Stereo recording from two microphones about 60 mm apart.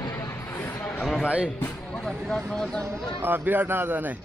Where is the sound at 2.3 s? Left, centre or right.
Centre.